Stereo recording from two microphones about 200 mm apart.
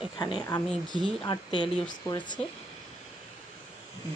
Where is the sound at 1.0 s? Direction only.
20° left (ahead or behind).